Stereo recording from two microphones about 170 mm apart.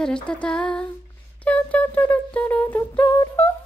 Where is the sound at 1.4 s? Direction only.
10° left (ahead or behind).